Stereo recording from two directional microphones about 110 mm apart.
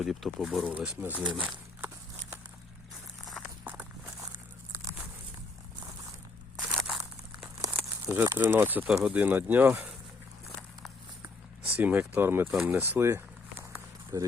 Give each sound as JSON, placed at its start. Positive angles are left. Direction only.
{"t": 0.0, "sound": "speech", "side_deg": 0}
{"t": 0.7, "sound": "speech", "side_deg": -10}
{"t": 6.6, "sound": "crushing", "side_deg": 0}
{"t": 7.7, "sound": "speech", "side_deg": -20}
{"t": 11.8, "sound": "speech", "side_deg": -15}
{"t": 12.6, "sound": "walk", "side_deg": -15}
{"t": 14.1, "sound": "speech", "side_deg": -30}